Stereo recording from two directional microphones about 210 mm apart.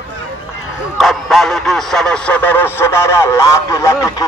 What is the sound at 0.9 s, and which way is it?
Speech, centre (ahead or behind).